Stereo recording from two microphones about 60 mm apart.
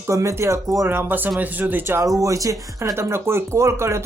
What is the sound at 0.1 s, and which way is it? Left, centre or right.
Speech, right.